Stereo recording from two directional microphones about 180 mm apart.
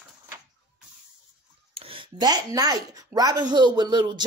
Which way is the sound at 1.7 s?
30° right (ahead or behind).